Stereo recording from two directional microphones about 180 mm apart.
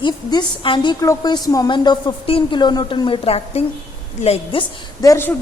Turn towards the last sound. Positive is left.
turn(degrees=15)  # may be behind; listen again after turning